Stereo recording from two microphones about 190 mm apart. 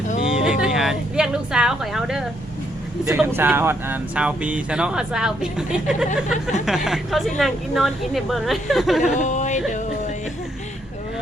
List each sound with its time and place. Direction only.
0.3 s speech: 5° right (ahead or behind)
9.1 s music: 40° left (ahead or behind)